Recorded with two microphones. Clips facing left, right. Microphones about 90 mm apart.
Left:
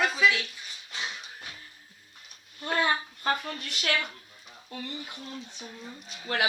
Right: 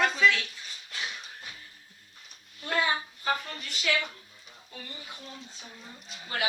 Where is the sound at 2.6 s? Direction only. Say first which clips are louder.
Left 1 dB; 55° left (ahead or behind).